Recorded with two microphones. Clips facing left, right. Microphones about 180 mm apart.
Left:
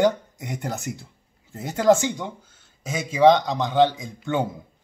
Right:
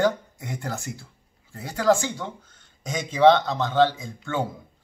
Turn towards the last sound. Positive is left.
turn(degrees=15)  # may be behind; listen again after turning